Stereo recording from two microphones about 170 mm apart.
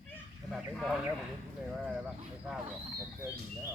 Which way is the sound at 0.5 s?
Centre (ahead or behind).